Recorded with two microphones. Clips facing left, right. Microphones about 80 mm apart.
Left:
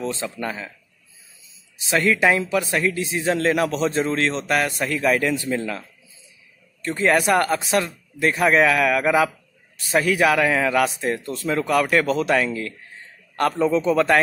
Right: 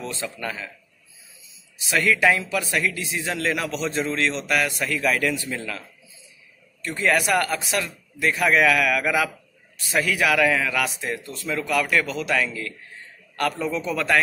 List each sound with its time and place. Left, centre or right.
0.0 s speech: left
1.9 s a man's voice: left